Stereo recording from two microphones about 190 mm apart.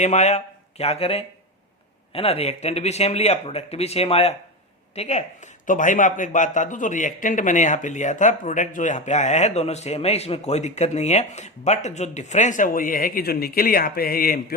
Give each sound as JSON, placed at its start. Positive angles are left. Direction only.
{"t": 0.0, "sound": "speech", "side_deg": 35}